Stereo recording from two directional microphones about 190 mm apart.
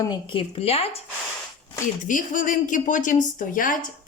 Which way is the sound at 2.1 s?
45° left (ahead or behind).